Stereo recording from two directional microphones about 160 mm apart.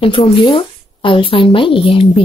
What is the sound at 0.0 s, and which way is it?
A woman's voice, 35° left (ahead or behind).